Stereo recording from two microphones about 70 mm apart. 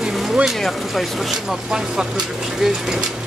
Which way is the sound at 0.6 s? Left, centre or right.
Centre.